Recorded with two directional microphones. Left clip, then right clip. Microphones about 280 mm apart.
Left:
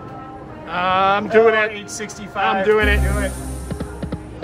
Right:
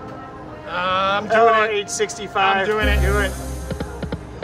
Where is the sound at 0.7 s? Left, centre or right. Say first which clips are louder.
Left 3 dB; left.